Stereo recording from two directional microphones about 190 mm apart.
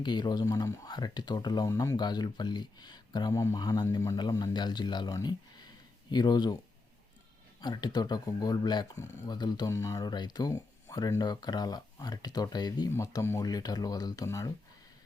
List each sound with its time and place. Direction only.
0.0 s speech: 25° left (ahead or behind)
7.6 s speech: 20° left (ahead or behind)